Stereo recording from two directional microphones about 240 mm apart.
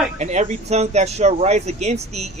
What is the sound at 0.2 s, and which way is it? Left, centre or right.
Speech, right.